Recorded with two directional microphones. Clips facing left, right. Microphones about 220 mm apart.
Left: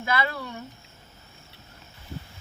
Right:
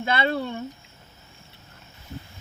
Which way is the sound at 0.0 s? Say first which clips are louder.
Right 4 dB; 25° right (ahead or behind).